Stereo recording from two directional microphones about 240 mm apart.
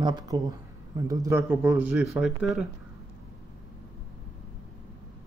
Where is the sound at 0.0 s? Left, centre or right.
Centre.